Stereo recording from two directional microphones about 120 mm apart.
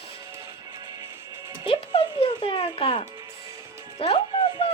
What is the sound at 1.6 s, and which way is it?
Music, 50° left (ahead or behind).